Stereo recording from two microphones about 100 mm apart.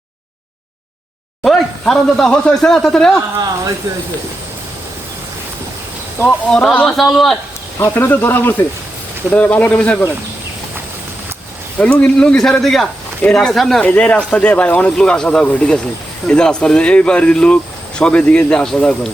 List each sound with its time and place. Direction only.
1.5 s speech: 5° left (ahead or behind)
3.3 s speech: 40° right (ahead or behind)
6.2 s speech: 10° left (ahead or behind)
7.8 s speech: 25° left (ahead or behind)
11.8 s speech: 10° left (ahead or behind)